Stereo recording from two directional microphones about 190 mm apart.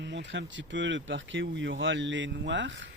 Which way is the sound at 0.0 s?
70° right (ahead or behind).